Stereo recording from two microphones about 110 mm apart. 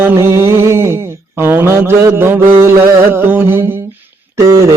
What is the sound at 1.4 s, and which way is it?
Mantra, 25° right (ahead or behind).